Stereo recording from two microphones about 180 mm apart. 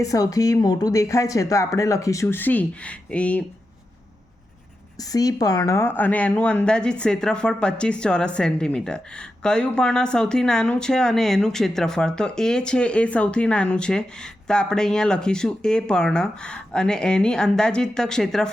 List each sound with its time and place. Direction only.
0.0 s speech: 20° left (ahead or behind)
5.1 s speech: 20° left (ahead or behind); by 18.5 s 5° left (ahead or behind)